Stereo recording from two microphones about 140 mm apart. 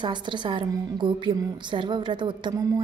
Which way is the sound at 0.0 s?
35° right (ahead or behind).